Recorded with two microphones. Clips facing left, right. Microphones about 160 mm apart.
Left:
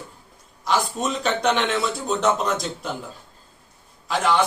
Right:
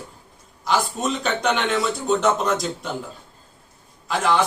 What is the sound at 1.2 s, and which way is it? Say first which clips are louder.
A man's voice: left 2 dB; centre (ahead or behind).